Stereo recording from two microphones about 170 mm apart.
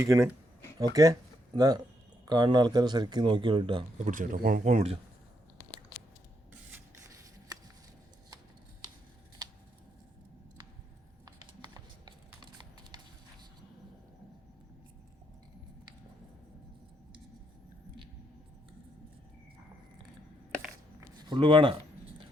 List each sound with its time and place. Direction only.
0.0 s speech: 20° right (ahead or behind)
4.0 s speech: 50° right (ahead or behind)
11.3 s a sound: 25° right (ahead or behind)
21.2 s speech: 25° right (ahead or behind)